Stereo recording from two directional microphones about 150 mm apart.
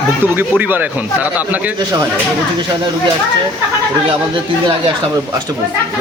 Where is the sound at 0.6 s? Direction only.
10° right (ahead or behind).